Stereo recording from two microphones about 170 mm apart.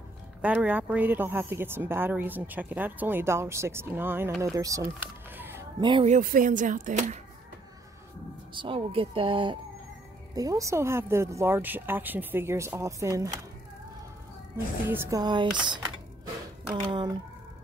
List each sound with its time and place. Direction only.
0.4 s speech: 10° right (ahead or behind)
5.8 s speech: 25° right (ahead or behind)
6.0 s speech: 50° right (ahead or behind)
8.5 s a woman's voice: 30° right (ahead or behind)
14.9 s speech: 15° right (ahead or behind)
16.9 s speech: 25° right (ahead or behind)